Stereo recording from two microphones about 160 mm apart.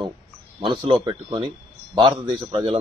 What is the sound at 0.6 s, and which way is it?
A man's voice, 30° right (ahead or behind).